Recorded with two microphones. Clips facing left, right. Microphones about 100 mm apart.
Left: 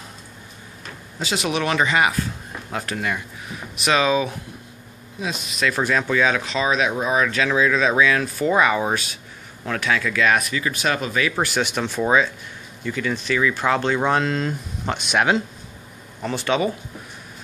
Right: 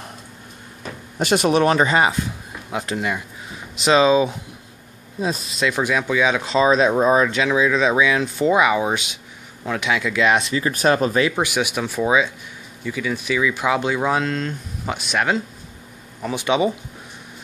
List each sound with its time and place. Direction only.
1.2 s speech: 50° right (ahead or behind); by 2.1 s 35° right (ahead or behind)
2.1 s speech: 15° right (ahead or behind)
5.7 s speech: 15° right (ahead or behind)
6.4 s speech: 30° right (ahead or behind)
7.2 s speech: 20° right (ahead or behind)
10.7 s speech: 40° right (ahead or behind)
11.3 s speech: 10° right (ahead or behind)
16.2 s speech: 10° right (ahead or behind)